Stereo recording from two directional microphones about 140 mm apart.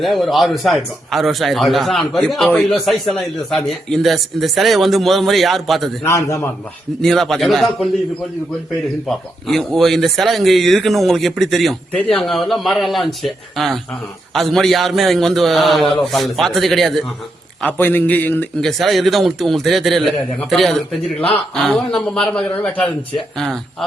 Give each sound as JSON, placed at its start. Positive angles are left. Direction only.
{"t": 0.0, "sound": "a man's voice", "side_deg": 0}
{"t": 6.0, "sound": "a man's voice", "side_deg": 20}
{"t": 7.0, "sound": "a man's voice", "side_deg": 5}
{"t": 9.0, "sound": "a man's voice", "side_deg": 0}
{"t": 17.6, "sound": "a man's voice", "side_deg": 10}
{"t": 18.6, "sound": "a man's voice", "side_deg": 0}